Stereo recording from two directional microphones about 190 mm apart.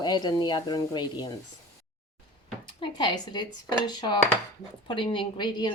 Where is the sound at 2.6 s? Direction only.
25° left (ahead or behind).